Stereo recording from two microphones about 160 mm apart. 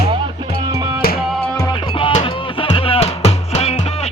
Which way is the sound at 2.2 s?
30° left (ahead or behind).